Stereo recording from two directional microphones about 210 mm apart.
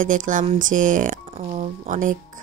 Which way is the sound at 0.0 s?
40° right (ahead or behind).